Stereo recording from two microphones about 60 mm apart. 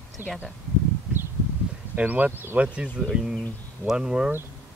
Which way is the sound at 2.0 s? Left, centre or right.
Right.